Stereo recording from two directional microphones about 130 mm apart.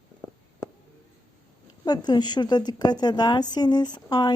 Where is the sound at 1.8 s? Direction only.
30° left (ahead or behind).